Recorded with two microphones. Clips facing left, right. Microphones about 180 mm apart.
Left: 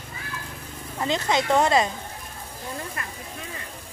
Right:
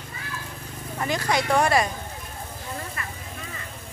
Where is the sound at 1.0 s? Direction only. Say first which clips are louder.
Left 1 dB; 20° left (ahead or behind).